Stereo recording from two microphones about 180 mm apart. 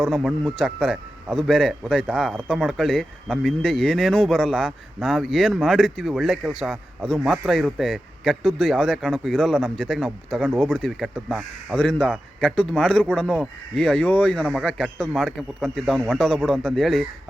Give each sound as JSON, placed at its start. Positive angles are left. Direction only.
{"t": 0.0, "sound": "speech", "side_deg": 0}